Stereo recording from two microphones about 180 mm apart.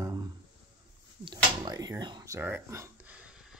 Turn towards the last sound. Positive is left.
turn(degrees=-15)  # may be behind; listen again after turning